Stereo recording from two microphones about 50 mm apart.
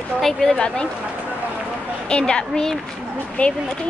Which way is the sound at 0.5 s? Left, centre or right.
Left.